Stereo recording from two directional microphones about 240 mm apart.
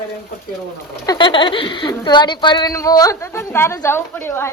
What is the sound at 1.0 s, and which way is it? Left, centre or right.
Speech, centre.